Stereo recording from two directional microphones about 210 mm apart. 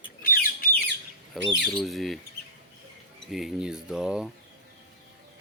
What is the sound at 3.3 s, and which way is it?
Speech, centre (ahead or behind).